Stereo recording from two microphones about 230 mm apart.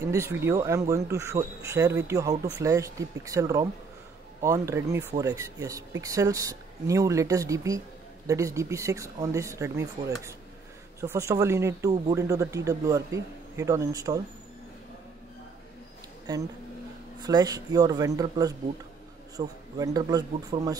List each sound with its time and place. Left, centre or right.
0.0 s speech: centre
16.3 s speech: centre